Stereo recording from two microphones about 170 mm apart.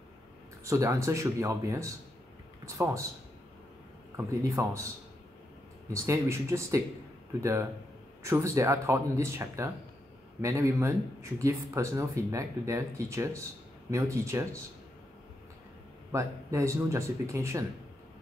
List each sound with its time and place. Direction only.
0.7 s speech: 15° right (ahead or behind)
4.2 s speech: 20° right (ahead or behind)
6.0 s speech: 15° right (ahead or behind)
16.1 s speech: 15° right (ahead or behind)